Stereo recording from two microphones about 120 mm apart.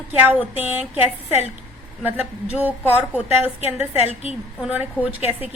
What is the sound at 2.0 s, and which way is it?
Speech, 15° right (ahead or behind).